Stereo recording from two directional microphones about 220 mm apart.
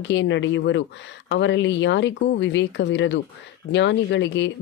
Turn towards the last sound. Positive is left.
turn(degrees=55)  # may be behind; listen again after turning